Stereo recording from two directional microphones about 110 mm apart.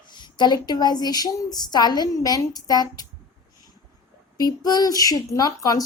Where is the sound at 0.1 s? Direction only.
45° left (ahead or behind).